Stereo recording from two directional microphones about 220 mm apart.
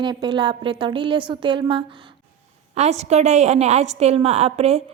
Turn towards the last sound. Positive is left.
turn(degrees=-30)  # may be behind; listen again after turning